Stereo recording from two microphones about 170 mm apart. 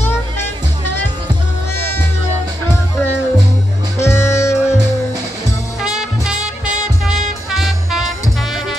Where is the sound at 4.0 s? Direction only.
15° left (ahead or behind).